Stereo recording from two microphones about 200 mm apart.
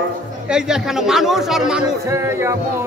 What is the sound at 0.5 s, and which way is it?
A man's voice, 5° right (ahead or behind).